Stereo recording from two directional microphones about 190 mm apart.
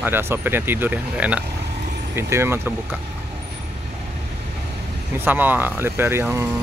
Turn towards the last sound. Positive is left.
turn(degrees=-10)  # may be behind; listen again after turning